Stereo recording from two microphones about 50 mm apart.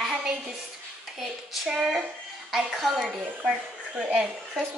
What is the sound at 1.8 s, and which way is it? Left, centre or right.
A woman's voice, centre.